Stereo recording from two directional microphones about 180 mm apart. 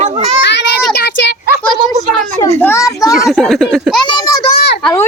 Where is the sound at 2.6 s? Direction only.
15° left (ahead or behind).